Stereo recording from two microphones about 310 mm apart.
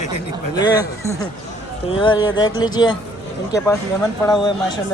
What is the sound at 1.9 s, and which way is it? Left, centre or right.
A man's voice, centre.